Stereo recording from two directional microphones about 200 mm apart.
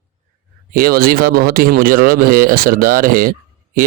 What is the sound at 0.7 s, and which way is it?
Speech, 45° right (ahead or behind).